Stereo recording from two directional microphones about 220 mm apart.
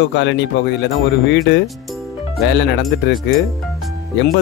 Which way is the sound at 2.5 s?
50° left (ahead or behind).